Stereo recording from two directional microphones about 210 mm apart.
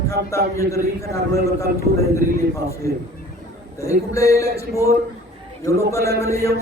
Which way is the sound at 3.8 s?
15° left (ahead or behind).